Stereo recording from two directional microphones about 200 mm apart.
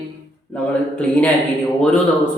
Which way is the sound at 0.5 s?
5° left (ahead or behind).